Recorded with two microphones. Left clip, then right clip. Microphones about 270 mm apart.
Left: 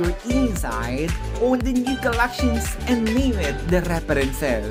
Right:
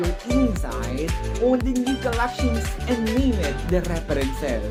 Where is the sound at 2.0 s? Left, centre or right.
Left.